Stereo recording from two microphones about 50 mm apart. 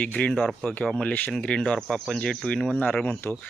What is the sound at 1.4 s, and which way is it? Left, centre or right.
Speech, centre.